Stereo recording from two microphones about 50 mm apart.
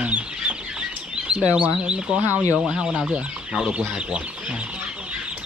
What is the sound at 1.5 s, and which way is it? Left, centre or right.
Speech, right.